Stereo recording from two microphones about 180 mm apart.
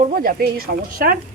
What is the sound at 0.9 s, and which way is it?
Speech, 55° right (ahead or behind).